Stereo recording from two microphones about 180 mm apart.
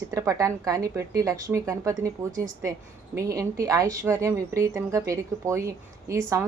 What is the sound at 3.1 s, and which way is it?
A woman's voice, 20° right (ahead or behind).